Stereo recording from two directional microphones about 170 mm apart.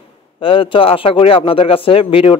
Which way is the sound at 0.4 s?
30° left (ahead or behind).